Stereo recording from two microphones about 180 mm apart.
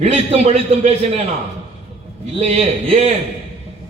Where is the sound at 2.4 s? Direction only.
35° right (ahead or behind).